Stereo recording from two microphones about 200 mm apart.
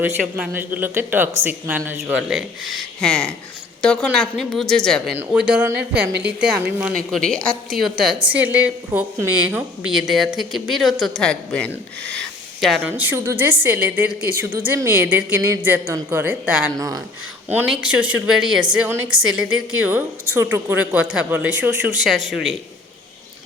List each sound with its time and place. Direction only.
0.0 s speech: 10° right (ahead or behind)
12.8 s speech: 10° right (ahead or behind)
16.7 s speech: 15° right (ahead or behind)
20.3 s speech: 10° right (ahead or behind)